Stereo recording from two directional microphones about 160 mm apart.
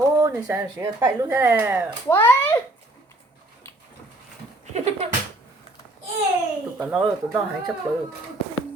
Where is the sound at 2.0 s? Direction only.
15° left (ahead or behind).